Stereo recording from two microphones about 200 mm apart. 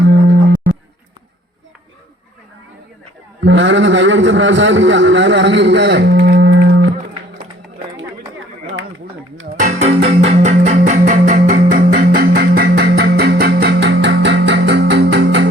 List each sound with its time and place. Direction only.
0.0 s a sound: 55° right (ahead or behind)
3.4 s a man's voice: 65° right (ahead or behind)
9.8 s music: 30° right (ahead or behind); by 15.4 s 60° right (ahead or behind)